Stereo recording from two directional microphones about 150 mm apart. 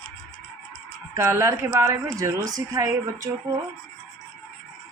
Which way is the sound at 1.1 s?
20° right (ahead or behind).